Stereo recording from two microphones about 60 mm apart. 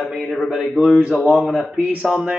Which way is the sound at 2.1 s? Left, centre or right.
Centre.